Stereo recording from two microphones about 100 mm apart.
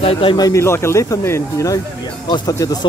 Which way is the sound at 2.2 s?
40° left (ahead or behind).